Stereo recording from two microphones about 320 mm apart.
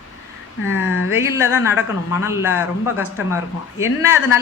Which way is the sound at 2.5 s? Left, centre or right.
Left.